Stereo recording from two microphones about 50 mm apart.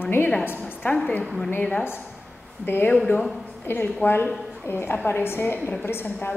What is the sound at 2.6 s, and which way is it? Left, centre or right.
A woman's voice, left.